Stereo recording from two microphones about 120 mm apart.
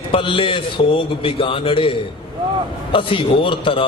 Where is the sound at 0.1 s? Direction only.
45° left (ahead or behind).